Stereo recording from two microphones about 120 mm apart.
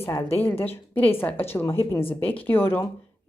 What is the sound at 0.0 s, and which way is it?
A woman's voice, 20° left (ahead or behind).